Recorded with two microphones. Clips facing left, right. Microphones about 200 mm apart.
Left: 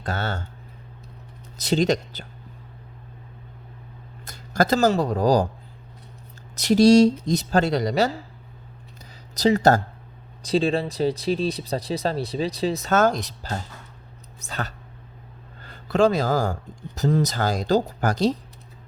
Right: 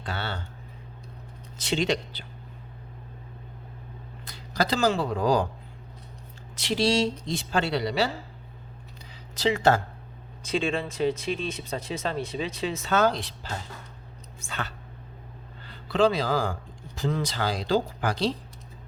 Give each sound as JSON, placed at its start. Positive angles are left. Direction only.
{"t": 0.0, "sound": "speech", "side_deg": 45}
{"t": 1.5, "sound": "speech", "side_deg": 40}
{"t": 4.3, "sound": "speech", "side_deg": 45}
{"t": 6.6, "sound": "speech", "side_deg": 45}
{"t": 9.3, "sound": "speech", "side_deg": 40}